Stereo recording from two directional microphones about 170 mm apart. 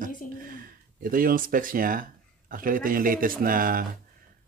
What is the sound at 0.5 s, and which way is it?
Speech, 55° right (ahead or behind).